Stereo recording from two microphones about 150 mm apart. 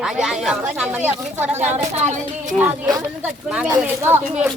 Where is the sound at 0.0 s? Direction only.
5° right (ahead or behind).